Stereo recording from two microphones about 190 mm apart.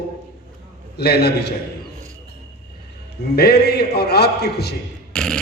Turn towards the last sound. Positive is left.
turn(degrees=5)  # may be behind; listen again after turning